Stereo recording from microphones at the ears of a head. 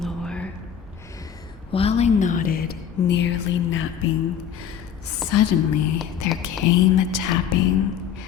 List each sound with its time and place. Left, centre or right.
1.7 s a woman's voice: left